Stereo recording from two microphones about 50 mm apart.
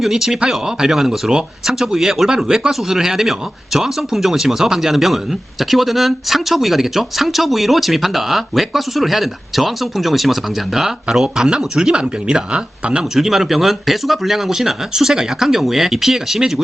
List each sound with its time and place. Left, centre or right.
0.0 s speech: centre
13.1 s speech: centre